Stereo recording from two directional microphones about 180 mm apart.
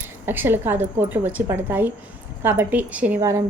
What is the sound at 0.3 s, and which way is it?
Speech, 10° right (ahead or behind).